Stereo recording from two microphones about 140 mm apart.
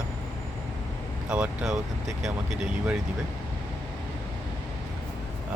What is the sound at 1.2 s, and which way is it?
Speech, 5° right (ahead or behind).